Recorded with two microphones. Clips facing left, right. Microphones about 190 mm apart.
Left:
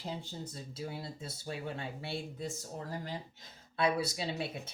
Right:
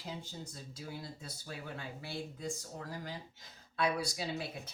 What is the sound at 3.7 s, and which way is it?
Speech, 25° left (ahead or behind).